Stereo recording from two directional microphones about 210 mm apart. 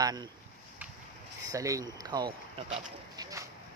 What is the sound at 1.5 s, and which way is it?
Speech, 15° right (ahead or behind).